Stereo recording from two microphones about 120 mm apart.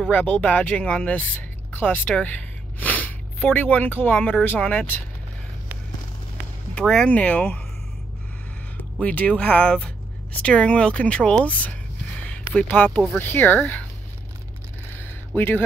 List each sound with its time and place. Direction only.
0.0 s speech: 10° left (ahead or behind)
6.7 s speech: 5° left (ahead or behind)
9.0 s speech: 10° left (ahead or behind)
15.0 s a sound: 15° left (ahead or behind)